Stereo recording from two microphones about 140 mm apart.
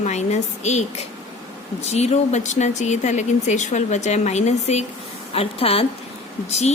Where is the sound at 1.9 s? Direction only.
50° left (ahead or behind).